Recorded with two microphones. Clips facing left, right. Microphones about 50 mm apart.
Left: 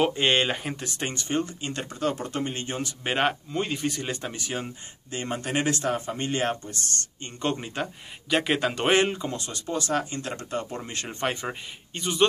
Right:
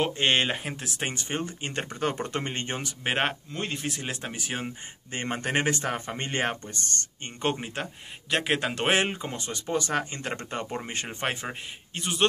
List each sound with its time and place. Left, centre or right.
0.0 s speech: centre
1.0 s speech: centre
1.8 s speech: right
3.0 s speech: centre
3.5 s speech: centre
5.1 s speech: right
7.4 s speech: centre
9.1 s speech: right
10.8 s speech: right